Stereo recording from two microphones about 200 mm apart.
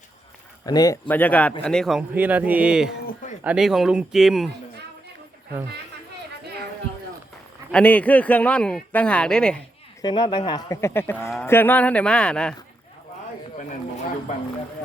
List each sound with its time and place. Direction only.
0.6 s speech: 20° left (ahead or behind)
1.0 s speech: 10° left (ahead or behind)
7.7 s speech: 5° left (ahead or behind)
10.0 s speech: 20° left (ahead or behind); by 12.5 s 5° left (ahead or behind)